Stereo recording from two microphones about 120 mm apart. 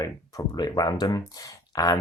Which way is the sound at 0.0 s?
35° left (ahead or behind).